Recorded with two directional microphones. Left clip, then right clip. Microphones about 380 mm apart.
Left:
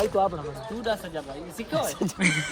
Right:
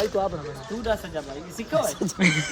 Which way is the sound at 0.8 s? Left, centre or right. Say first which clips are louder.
Right 2 dB; centre.